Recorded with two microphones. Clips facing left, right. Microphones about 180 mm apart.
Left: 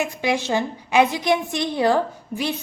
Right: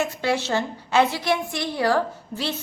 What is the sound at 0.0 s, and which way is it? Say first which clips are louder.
A woman's voice: left 1 dB; 15° left (ahead or behind).